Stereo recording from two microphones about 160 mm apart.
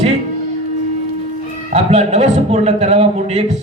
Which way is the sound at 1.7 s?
45° right (ahead or behind).